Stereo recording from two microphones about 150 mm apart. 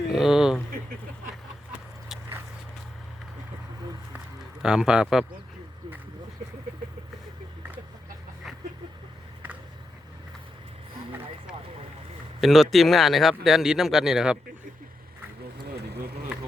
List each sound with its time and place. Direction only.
0.1 s a sound: centre (ahead or behind)
4.6 s speech: 5° right (ahead or behind)
12.4 s speech: centre (ahead or behind)
15.6 s vehicle: 90° right